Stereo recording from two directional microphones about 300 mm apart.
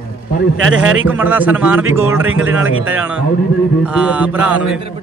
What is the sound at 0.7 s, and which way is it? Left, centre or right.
Speech, right.